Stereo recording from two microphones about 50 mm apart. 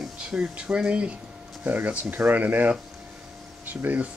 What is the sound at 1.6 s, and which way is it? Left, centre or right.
Speech, right.